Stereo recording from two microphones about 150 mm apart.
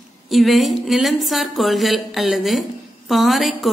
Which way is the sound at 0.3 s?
Centre (ahead or behind).